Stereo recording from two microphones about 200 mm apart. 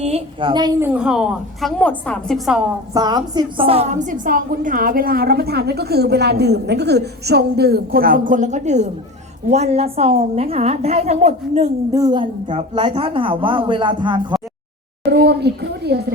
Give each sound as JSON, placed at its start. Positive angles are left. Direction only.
{"t": 0.0, "sound": "a woman's voice", "side_deg": -30}
{"t": 2.9, "sound": "a woman's voice", "side_deg": -20}
{"t": 11.9, "sound": "a woman's voice", "side_deg": -20}
{"t": 15.1, "sound": "speech", "side_deg": -55}